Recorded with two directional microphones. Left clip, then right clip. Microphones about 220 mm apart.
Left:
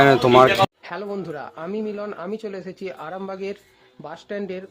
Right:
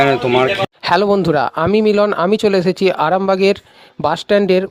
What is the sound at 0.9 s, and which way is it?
Speech, 40° right (ahead or behind).